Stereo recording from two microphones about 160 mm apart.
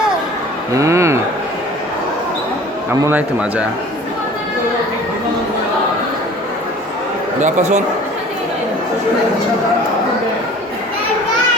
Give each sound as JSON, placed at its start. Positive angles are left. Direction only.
{"t": 0.8, "sound": "speech", "side_deg": -20}
{"t": 3.0, "sound": "a man's voice", "side_deg": -10}
{"t": 7.3, "sound": "a man's voice", "side_deg": -45}